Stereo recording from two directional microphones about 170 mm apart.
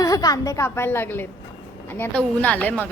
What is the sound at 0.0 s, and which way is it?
A woman's voice, 20° left (ahead or behind).